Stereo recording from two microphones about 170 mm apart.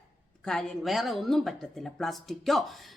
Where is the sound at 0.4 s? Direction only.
5° left (ahead or behind).